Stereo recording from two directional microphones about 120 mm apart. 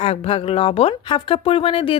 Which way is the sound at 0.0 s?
55° left (ahead or behind).